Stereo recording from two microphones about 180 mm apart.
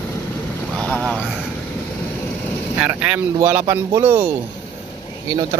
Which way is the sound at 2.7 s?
5° right (ahead or behind).